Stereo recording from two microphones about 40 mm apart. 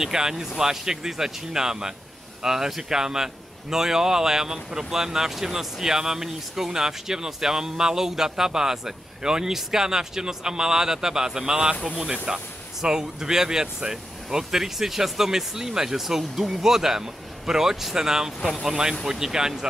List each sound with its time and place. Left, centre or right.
0.0 s speech: centre